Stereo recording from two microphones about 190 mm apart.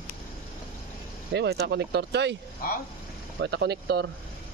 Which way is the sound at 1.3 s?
60° right (ahead or behind).